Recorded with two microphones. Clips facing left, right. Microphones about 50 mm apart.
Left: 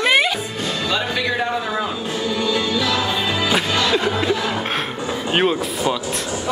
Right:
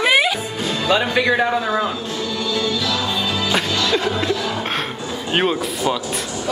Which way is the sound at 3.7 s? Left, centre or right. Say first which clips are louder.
Left 1 dB; centre.